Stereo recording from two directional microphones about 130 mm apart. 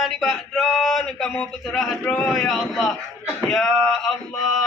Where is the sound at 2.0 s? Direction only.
15° left (ahead or behind).